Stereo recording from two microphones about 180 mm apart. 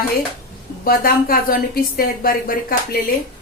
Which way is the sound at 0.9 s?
55° left (ahead or behind).